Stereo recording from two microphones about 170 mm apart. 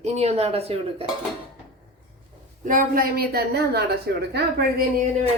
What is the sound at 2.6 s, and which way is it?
A woman's voice, 50° right (ahead or behind).